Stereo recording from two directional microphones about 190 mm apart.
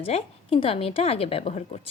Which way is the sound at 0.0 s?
30° left (ahead or behind).